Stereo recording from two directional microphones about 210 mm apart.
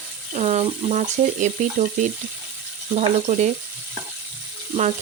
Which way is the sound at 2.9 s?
30° right (ahead or behind).